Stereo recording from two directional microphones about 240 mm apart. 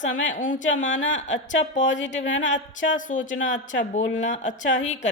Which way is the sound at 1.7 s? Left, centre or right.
Left.